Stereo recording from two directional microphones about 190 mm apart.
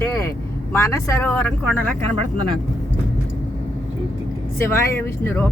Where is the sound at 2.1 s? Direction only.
30° right (ahead or behind).